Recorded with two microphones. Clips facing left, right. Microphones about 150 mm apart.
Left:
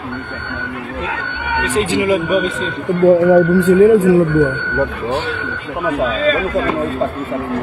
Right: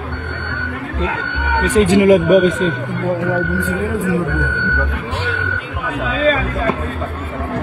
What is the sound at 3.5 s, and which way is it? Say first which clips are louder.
Speech: left 11 dB; 80° left.